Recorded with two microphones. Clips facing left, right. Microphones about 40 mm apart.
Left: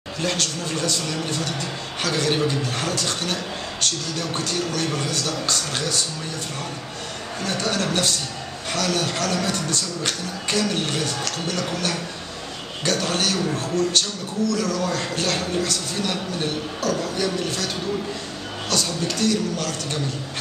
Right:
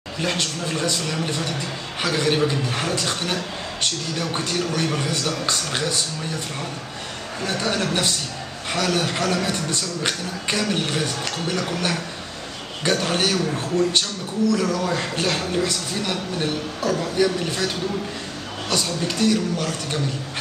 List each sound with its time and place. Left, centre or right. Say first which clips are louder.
0.2 s a man's voice: right 1 dB; centre
7.4 s a man's voice: right 1 dB; centre
18.7 s a man's voice: right 1 dB; centre